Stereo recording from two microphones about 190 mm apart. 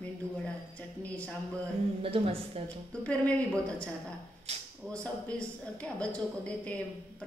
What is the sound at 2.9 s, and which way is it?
A woman's voice, 5° left (ahead or behind).